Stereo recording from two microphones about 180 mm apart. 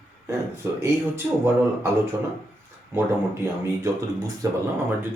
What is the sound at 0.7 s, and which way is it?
Speech, 15° right (ahead or behind).